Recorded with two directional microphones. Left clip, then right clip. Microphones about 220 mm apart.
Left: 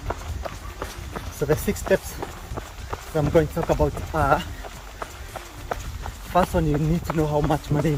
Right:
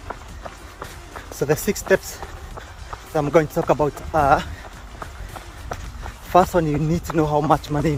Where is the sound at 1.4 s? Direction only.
20° right (ahead or behind).